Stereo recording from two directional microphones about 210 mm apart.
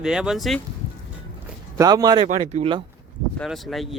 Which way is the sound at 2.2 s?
35° right (ahead or behind).